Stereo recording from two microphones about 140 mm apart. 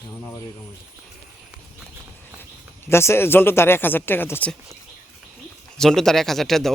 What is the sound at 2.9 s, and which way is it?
Speech, 20° left (ahead or behind).